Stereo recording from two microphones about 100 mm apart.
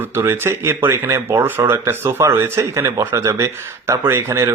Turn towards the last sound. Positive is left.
turn(degrees=-25)  # may be behind; listen again after turning